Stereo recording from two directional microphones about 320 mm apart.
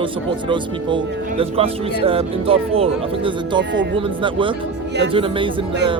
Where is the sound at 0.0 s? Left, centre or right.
Centre.